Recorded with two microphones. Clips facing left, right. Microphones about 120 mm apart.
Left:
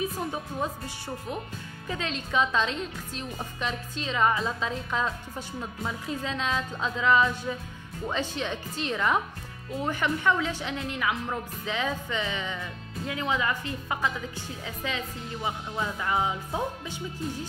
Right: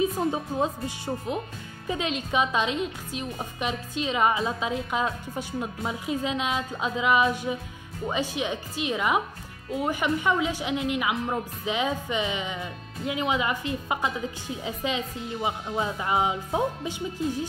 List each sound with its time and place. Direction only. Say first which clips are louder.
0.0 s a woman's voice: right 6 dB; 25° right (ahead or behind)